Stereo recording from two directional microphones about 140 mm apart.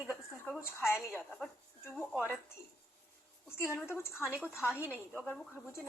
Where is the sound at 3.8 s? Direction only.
15° left (ahead or behind).